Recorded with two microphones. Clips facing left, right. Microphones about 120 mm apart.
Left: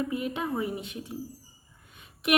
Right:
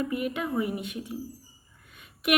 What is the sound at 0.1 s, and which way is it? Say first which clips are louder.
A woman's voice: right 1 dB; 30° left (ahead or behind).